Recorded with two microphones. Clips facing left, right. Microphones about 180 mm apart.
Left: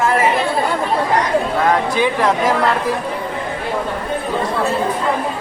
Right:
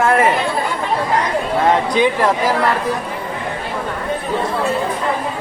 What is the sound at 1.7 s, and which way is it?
Speech, 20° right (ahead or behind).